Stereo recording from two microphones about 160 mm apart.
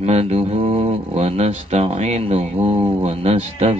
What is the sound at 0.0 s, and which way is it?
Speech, 40° right (ahead or behind).